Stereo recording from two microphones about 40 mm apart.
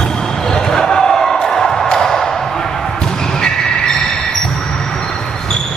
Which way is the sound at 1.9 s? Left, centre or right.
Centre.